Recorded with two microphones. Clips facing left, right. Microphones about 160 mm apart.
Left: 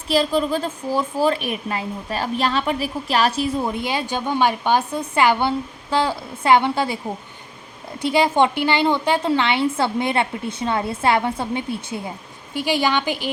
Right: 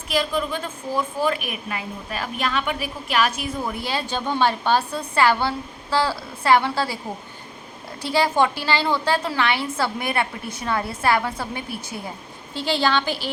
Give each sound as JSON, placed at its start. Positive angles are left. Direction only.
{"t": 0.1, "sound": "a woman's voice", "side_deg": 30}
{"t": 8.0, "sound": "a woman's voice", "side_deg": 20}